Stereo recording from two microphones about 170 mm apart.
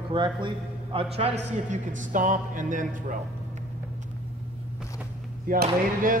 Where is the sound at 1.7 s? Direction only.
50° right (ahead or behind).